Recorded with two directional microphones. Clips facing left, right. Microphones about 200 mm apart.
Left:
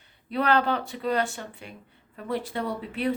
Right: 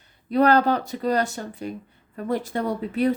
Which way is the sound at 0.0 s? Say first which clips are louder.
Right 8 dB; 40° right (ahead or behind).